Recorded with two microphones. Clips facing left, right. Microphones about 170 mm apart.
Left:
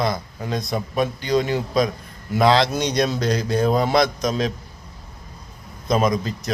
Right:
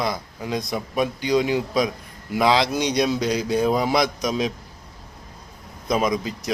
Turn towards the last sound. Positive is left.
turn(degrees=-10)  # may be behind; listen again after turning